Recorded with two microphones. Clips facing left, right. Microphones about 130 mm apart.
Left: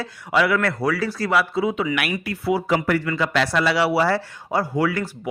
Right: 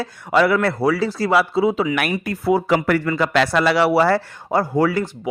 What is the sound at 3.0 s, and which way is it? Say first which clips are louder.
Speech: right 4 dB; 45° right (ahead or behind).